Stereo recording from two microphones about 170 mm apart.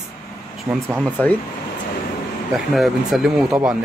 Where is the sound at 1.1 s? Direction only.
10° left (ahead or behind).